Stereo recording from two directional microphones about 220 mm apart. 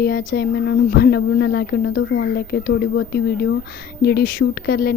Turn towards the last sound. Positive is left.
turn(degrees=45)  # may be behind; listen again after turning